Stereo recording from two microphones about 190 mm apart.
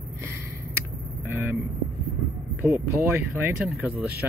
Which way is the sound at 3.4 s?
5° right (ahead or behind).